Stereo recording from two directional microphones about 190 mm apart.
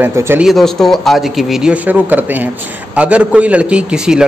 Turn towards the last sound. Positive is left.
turn(degrees=-5)  # may be behind; listen again after turning